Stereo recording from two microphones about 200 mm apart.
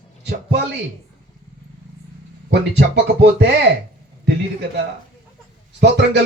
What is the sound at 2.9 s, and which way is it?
A man's voice, 60° right (ahead or behind).